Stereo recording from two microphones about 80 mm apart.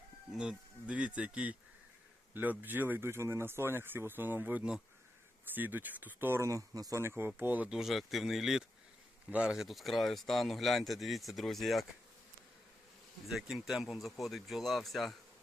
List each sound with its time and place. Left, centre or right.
0.3 s speech: centre; by 6.5 s right
6.5 s speech: right
7.0 s speech: right
7.7 s speech: centre
13.2 s speech: centre